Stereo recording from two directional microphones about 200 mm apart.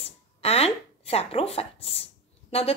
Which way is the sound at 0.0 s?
30° left (ahead or behind).